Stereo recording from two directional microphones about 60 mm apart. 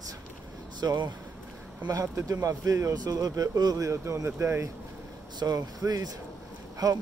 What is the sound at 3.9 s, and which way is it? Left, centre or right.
Speech, right.